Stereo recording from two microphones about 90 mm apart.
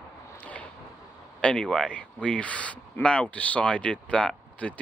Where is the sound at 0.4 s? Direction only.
15° left (ahead or behind).